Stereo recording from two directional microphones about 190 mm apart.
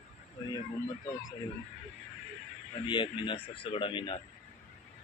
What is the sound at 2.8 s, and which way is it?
Speech, 25° left (ahead or behind).